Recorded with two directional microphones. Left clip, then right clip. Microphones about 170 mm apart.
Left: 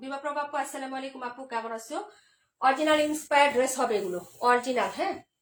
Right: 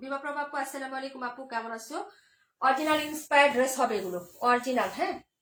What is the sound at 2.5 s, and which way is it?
A woman's voice, 25° left (ahead or behind).